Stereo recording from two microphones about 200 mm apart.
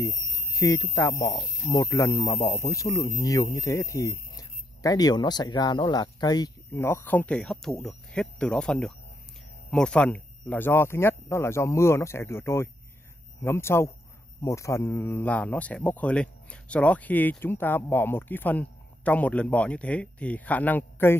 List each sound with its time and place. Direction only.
0.0 s speech: 15° left (ahead or behind)